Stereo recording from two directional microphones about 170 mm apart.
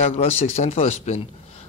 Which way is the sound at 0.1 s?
40° left (ahead or behind).